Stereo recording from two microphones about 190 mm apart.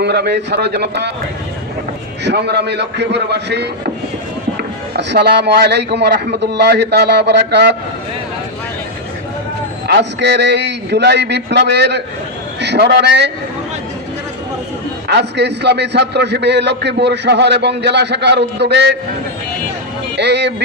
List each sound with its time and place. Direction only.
0.0 s a man's voice: 60° right (ahead or behind)
2.2 s a man's voice: 60° right (ahead or behind)
4.9 s a man's voice: 60° right (ahead or behind)
9.8 s a man's voice: 60° right (ahead or behind)
15.0 s a man's voice: 60° right (ahead or behind)
20.1 s a man's voice: 65° right (ahead or behind)